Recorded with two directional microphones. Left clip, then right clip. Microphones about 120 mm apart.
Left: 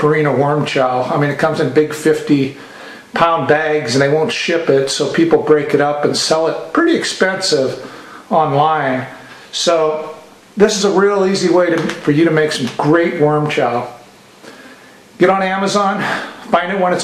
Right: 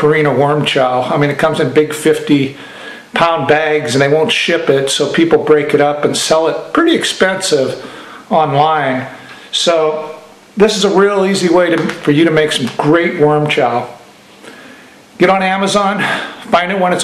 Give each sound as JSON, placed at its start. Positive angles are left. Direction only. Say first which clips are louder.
{"t": 0.0, "sound": "speech", "louder": "right 3 dB", "side_deg": -20}
{"t": 10.6, "sound": "speech", "louder": "right 2 dB", "side_deg": -20}
{"t": 15.1, "sound": "speech", "louder": "right 2 dB", "side_deg": -15}